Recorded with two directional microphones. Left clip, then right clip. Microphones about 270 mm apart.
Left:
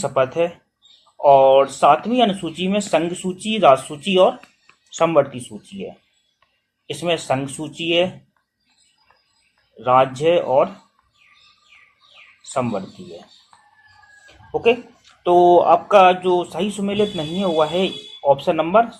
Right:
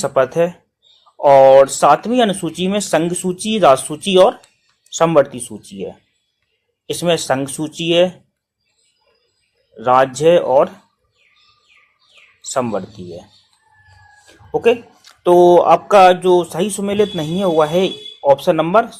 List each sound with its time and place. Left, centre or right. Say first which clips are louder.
0.0 s speech: right 4 dB; right
9.7 s speech: right 3 dB; right
12.5 s speech: right 3 dB; right
14.5 s speech: right 3 dB; right